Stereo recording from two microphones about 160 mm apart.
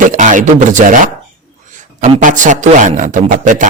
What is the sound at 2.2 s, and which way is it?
A man's voice, 50° right (ahead or behind).